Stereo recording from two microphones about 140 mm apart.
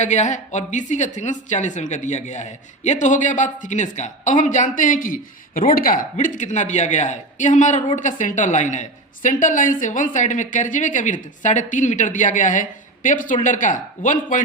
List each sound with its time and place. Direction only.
0.0 s a woman's voice: 55° left (ahead or behind)